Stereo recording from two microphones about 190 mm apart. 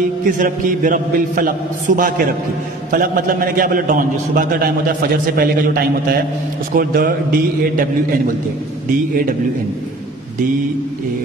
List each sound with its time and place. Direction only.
0.4 s a man's voice: 45° right (ahead or behind)